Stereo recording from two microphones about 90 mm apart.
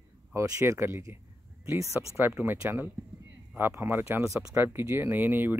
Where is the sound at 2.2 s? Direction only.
20° right (ahead or behind).